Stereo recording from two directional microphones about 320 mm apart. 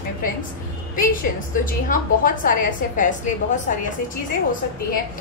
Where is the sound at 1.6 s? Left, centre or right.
Left.